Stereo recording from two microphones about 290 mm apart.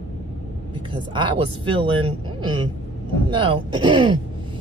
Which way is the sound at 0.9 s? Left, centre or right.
Centre.